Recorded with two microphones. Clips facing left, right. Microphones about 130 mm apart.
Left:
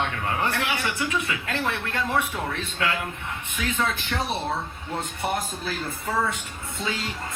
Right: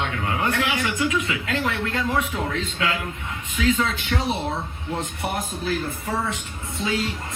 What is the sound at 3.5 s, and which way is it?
Speech, 45° left (ahead or behind).